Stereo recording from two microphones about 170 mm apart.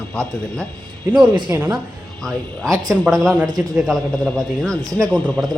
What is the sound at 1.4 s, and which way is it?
A man's voice, 15° right (ahead or behind).